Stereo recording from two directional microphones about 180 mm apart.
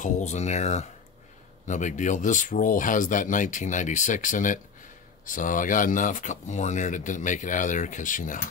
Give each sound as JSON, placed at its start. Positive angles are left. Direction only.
{"t": 0.0, "sound": "speech", "side_deg": 40}